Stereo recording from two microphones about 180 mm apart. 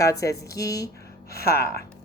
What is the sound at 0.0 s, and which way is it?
Speech, 20° left (ahead or behind).